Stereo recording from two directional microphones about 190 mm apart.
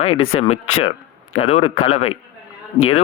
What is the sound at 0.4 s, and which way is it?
Speech, 35° left (ahead or behind).